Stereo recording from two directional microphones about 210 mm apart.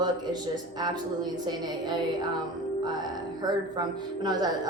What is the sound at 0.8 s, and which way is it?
A woman's voice, 20° right (ahead or behind).